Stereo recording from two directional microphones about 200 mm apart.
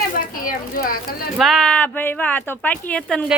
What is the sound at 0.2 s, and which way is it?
Speech, 45° left (ahead or behind).